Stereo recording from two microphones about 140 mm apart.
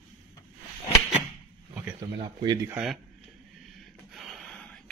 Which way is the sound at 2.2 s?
30° right (ahead or behind).